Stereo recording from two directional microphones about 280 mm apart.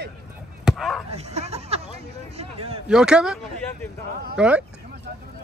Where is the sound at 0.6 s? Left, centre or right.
Centre.